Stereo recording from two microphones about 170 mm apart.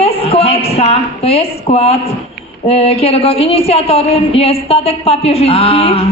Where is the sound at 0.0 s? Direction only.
35° left (ahead or behind).